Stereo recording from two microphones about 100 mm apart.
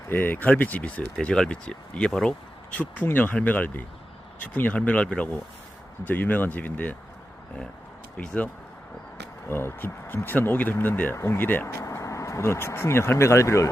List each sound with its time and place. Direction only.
0.1 s speech: 20° left (ahead or behind)
8.2 s speech: 10° left (ahead or behind)
9.5 s speech: 25° left (ahead or behind)